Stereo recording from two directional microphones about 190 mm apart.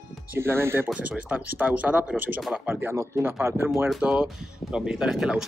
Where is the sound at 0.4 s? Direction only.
10° right (ahead or behind).